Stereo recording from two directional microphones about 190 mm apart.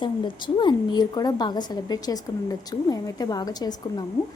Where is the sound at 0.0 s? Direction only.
25° left (ahead or behind).